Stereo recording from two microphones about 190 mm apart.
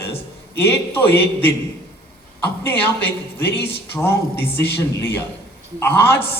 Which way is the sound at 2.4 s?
10° left (ahead or behind).